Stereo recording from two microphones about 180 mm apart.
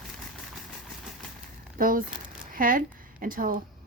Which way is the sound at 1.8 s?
50° right (ahead or behind).